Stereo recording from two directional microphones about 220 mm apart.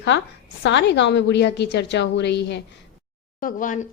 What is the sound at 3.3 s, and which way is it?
Speech, 40° left (ahead or behind).